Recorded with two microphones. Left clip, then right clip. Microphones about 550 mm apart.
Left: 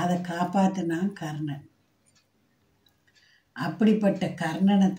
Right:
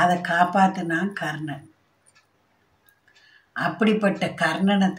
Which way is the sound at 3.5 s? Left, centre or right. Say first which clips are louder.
Right 4 dB; left.